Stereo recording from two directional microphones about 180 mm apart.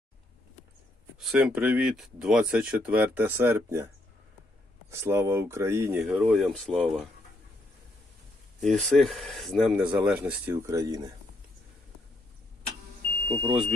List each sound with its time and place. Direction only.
1.2 s speech: 5° right (ahead or behind)
4.9 s speech: 15° right (ahead or behind)
6.0 s speech: centre (ahead or behind)
8.6 s speech: 5° left (ahead or behind); by 11.0 s 20° right (ahead or behind)
13.2 s speech: 30° right (ahead or behind)
13.5 s speech: centre (ahead or behind)